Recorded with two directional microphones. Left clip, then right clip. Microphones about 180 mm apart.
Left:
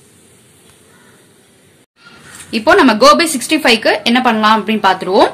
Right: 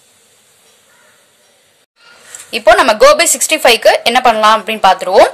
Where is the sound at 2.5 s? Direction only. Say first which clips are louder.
Right 2 dB; 35° right (ahead or behind).